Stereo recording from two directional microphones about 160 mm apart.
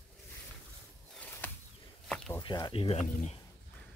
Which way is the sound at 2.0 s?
Centre (ahead or behind).